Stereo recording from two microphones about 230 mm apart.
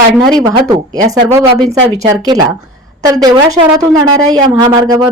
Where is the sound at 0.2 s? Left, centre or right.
Centre.